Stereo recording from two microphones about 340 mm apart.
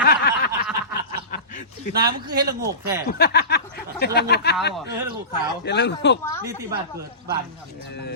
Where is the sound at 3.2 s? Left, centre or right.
Left.